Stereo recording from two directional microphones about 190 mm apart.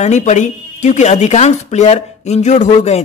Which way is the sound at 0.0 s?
35° left (ahead or behind).